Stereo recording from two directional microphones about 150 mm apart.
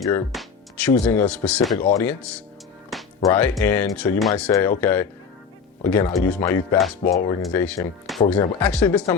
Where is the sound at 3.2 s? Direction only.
20° left (ahead or behind).